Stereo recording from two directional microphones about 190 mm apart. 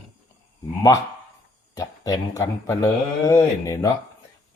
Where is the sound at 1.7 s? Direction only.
20° left (ahead or behind).